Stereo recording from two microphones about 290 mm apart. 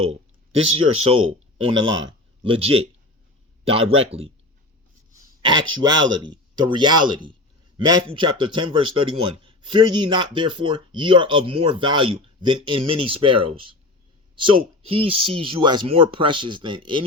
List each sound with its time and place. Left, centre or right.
0.5 s speech: right